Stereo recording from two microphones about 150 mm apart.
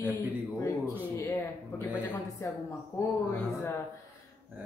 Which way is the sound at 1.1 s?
15° left (ahead or behind).